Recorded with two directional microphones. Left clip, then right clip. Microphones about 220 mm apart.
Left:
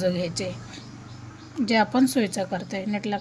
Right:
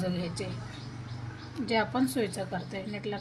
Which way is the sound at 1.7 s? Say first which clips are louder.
Left 7 dB; 50° left (ahead or behind).